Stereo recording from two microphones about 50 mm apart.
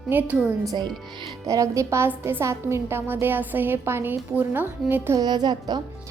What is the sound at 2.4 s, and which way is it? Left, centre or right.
Speech, right.